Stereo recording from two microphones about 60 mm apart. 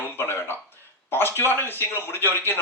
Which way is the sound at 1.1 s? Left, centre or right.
Left.